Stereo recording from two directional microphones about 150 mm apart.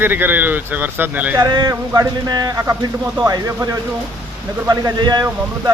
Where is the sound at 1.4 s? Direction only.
25° right (ahead or behind).